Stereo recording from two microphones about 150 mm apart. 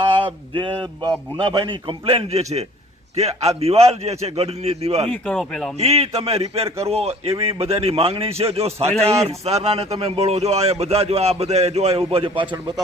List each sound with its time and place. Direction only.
0.3 s a man's voice: 35° right (ahead or behind)
5.2 s speech: 5° left (ahead or behind)
5.8 s speech: 45° right (ahead or behind)
6.7 s a man's voice: 20° right (ahead or behind)
6.9 s a man's voice: 45° right (ahead or behind)